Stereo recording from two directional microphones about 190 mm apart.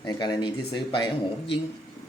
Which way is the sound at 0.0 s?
20° left (ahead or behind).